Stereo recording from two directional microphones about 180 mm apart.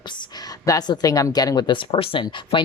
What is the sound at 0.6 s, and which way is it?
Speech, 20° left (ahead or behind).